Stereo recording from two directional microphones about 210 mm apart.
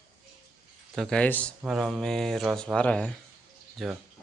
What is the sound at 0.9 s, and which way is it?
Speech, 5° left (ahead or behind).